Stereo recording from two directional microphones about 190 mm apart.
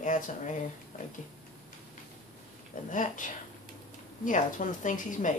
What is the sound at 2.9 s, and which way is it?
Speech, 40° left (ahead or behind).